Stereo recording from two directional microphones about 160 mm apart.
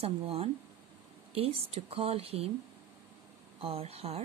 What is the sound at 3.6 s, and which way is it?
Speech, 35° right (ahead or behind).